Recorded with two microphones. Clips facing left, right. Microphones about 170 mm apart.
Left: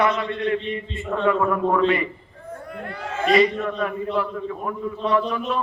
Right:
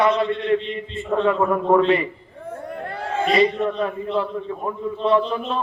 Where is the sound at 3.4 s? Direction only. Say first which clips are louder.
Right 1 dB; 25° right (ahead or behind).